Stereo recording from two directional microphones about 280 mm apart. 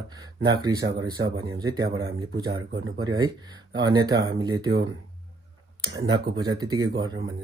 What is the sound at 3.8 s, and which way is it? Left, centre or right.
Speech, centre.